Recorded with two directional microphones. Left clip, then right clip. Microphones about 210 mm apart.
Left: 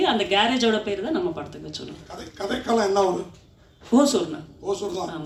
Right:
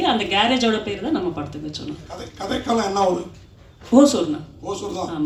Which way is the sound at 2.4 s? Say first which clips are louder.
Right 1 dB; 40° left (ahead or behind).